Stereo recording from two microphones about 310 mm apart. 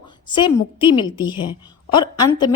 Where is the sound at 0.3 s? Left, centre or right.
Centre.